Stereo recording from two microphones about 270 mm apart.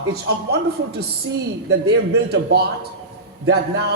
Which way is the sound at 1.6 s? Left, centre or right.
Right.